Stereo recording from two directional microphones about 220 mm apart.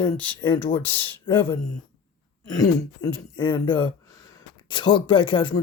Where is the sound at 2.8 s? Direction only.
15° left (ahead or behind).